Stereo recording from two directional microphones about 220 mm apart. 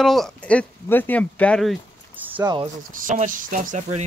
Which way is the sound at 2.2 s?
10° right (ahead or behind).